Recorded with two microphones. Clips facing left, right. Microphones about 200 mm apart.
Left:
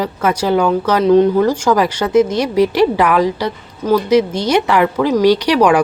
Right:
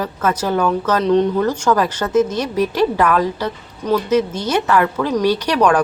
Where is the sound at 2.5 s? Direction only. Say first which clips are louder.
Left 6 dB; 80° left.